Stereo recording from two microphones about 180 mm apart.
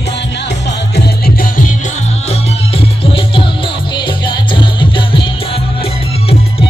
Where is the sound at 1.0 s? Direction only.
55° left (ahead or behind).